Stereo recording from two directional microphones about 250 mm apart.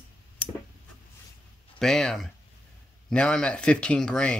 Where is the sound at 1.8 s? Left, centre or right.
Centre.